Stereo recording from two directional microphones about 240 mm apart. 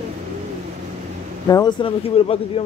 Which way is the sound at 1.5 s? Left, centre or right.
Centre.